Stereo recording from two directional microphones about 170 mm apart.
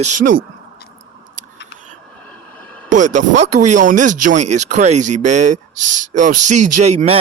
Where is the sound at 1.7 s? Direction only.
90° left.